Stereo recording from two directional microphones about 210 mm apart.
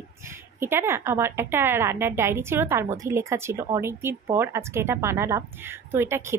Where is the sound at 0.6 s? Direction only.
10° right (ahead or behind).